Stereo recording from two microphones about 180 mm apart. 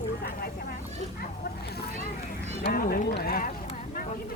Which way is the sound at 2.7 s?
55° left (ahead or behind).